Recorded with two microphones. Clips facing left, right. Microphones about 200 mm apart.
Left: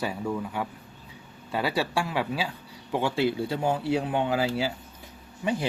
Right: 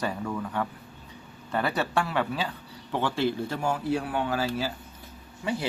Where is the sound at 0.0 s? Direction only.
10° left (ahead or behind).